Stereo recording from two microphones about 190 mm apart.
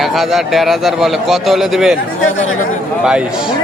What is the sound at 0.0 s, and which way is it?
A man's voice, centre (ahead or behind).